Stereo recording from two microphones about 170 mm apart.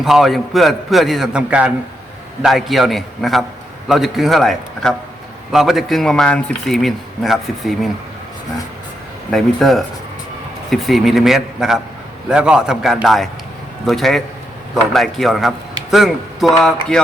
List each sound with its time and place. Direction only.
0.0 s speech: centre (ahead or behind)
9.3 s speech: centre (ahead or behind)